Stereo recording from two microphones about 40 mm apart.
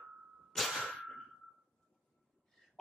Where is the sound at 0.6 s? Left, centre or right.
Centre.